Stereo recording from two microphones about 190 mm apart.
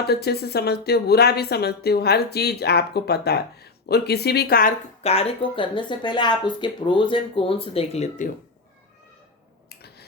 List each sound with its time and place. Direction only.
0.0 s speech: 55° left (ahead or behind)
5.0 s speech: 30° left (ahead or behind)
9.6 s a sound: 55° left (ahead or behind)